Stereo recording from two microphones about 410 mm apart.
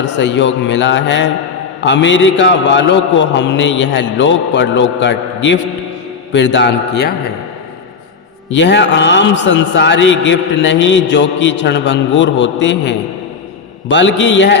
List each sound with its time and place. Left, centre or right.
0.0 s a man's voice: left
8.5 s a man's voice: left